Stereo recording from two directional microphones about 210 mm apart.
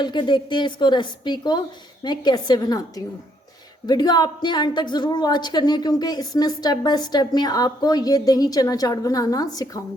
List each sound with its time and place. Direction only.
0.0 s a woman's voice: 20° left (ahead or behind)